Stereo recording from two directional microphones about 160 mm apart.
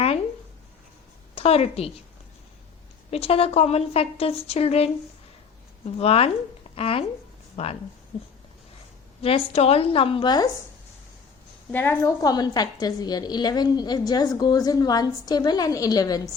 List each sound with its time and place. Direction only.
1.4 s a woman's voice: 40° left (ahead or behind)
3.1 s a woman's voice: 40° left (ahead or behind)
6.0 s a woman's voice: 40° left (ahead or behind)
9.2 s a woman's voice: 40° left (ahead or behind)
11.7 s a woman's voice: 15° left (ahead or behind)